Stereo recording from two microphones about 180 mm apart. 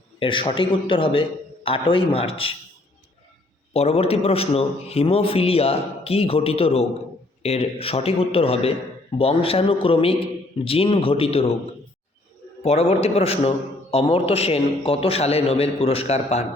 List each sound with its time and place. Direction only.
0.2 s a man's voice: 30° left (ahead or behind)
3.7 s a man's voice: 35° left (ahead or behind)
12.6 s a man's voice: 35° left (ahead or behind)